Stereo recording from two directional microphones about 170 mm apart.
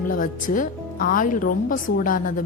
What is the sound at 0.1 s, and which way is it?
Speech, 50° left (ahead or behind).